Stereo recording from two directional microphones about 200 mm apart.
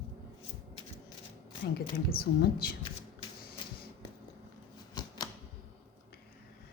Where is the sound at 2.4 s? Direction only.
50° left (ahead or behind).